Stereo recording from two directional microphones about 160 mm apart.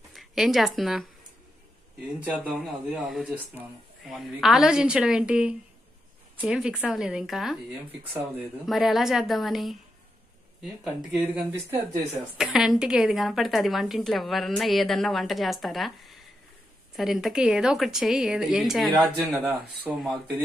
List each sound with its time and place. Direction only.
0.1 s speech: centre (ahead or behind)
2.1 s a woman's voice: 10° right (ahead or behind)
8.6 s a woman's voice: centre (ahead or behind)
16.9 s a woman's voice: centre (ahead or behind)